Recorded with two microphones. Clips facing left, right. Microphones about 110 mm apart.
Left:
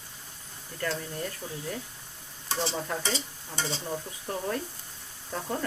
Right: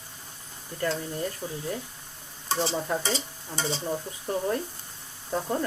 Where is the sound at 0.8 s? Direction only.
15° right (ahead or behind).